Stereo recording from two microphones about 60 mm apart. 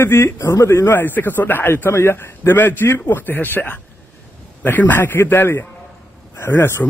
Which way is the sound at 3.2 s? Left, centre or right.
Left.